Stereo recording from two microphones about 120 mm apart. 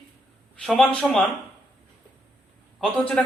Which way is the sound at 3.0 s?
10° left (ahead or behind).